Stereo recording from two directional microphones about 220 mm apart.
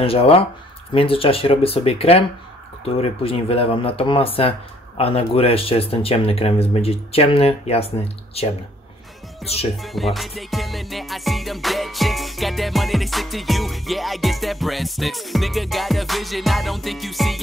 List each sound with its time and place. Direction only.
0.0 s speech: 25° left (ahead or behind)
9.4 s speech: centre (ahead or behind)
9.8 s music: centre (ahead or behind)